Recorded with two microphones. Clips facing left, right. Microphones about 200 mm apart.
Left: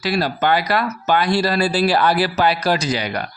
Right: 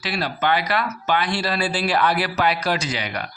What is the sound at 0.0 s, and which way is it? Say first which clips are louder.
Speech: left 5 dB; 40° left (ahead or behind).